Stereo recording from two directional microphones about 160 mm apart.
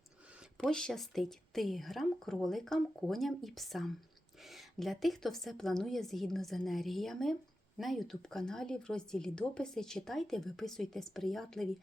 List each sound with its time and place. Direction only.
0.7 s speech: 5° left (ahead or behind)